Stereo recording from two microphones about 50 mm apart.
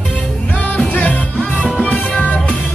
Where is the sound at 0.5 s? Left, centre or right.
Left.